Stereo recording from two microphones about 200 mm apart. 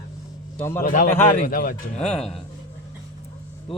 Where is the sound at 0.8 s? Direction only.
45° left (ahead or behind).